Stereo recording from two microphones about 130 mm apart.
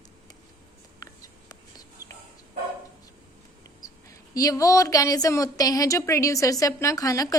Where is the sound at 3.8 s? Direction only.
30° left (ahead or behind).